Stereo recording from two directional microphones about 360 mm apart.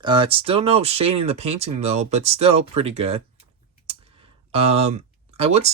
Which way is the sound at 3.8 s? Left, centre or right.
Centre.